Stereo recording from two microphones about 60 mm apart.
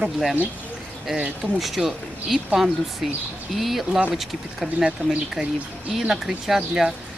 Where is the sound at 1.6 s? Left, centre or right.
Centre.